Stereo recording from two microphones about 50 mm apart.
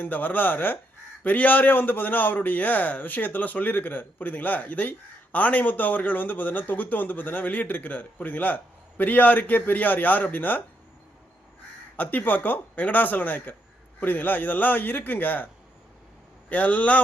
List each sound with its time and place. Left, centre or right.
0.0 s a man's voice: left
11.9 s a man's voice: left
16.5 s a man's voice: left